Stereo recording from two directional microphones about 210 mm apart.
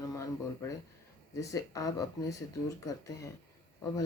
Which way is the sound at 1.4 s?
15° left (ahead or behind).